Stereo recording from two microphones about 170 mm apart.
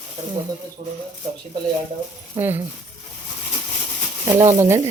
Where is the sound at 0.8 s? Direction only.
40° right (ahead or behind).